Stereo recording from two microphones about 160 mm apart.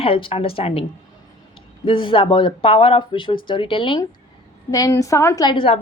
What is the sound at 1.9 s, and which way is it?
Speech, 35° left (ahead or behind).